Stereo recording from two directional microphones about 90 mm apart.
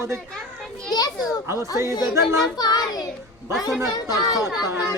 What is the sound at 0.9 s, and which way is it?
Children playing, 45° left (ahead or behind).